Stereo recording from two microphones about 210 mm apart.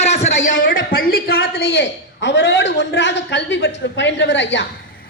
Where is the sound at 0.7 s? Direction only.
40° left (ahead or behind).